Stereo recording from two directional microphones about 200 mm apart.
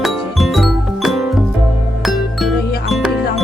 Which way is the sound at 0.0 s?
Centre (ahead or behind).